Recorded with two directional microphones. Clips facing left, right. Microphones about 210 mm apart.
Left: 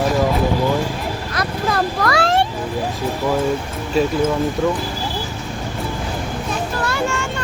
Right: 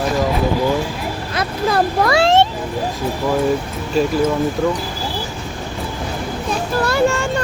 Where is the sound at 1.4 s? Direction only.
25° right (ahead or behind).